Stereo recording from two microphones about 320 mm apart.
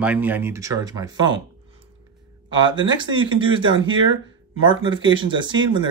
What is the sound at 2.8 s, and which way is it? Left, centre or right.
Speech, centre.